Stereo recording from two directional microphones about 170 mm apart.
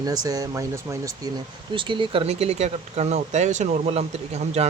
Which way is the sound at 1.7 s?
30° right (ahead or behind).